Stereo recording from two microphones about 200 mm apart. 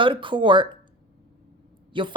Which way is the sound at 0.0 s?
25° right (ahead or behind).